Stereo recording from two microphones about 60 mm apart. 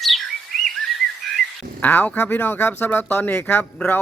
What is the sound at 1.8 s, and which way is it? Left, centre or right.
Speech, left.